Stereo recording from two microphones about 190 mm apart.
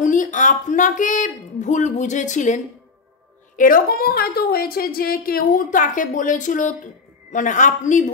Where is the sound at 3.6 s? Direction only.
50° left (ahead or behind).